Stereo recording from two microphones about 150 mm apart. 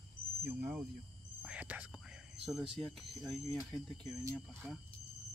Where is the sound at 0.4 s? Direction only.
90° right.